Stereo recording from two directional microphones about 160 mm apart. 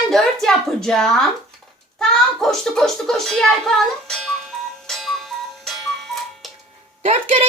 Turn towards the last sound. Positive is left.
turn(degrees=-35)  # may be behind; listen again after turning